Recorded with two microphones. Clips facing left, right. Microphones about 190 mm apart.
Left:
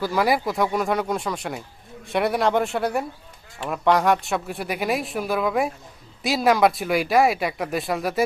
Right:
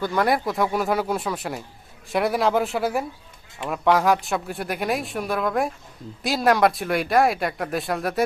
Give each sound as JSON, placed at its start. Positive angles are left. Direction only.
{"t": 0.0, "sound": "speech", "side_deg": 5}